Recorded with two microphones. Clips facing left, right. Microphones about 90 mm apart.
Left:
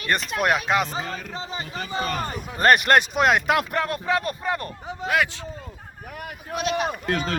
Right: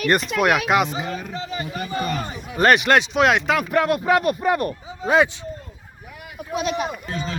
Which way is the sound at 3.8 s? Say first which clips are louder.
Right 6 dB; 20° right (ahead or behind).